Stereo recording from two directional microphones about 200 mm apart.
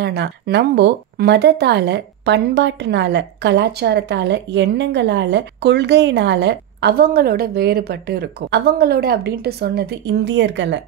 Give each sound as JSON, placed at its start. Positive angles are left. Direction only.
{"t": 0.0, "sound": "speech", "side_deg": -60}